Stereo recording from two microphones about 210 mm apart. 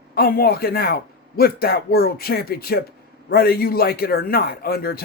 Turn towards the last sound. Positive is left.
turn(degrees=45)  # may be behind; listen again after turning